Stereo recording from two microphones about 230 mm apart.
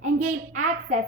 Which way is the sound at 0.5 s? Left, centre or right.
Right.